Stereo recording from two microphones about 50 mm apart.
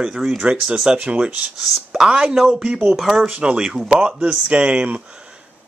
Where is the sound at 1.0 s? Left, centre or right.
Right.